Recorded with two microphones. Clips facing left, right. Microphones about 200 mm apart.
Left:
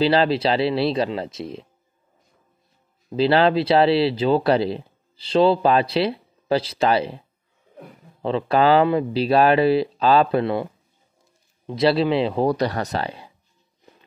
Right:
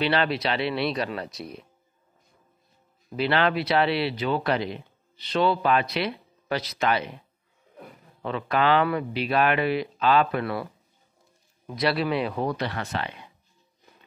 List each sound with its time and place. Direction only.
0.0 s speech: 30° left (ahead or behind)
3.1 s speech: 30° left (ahead or behind)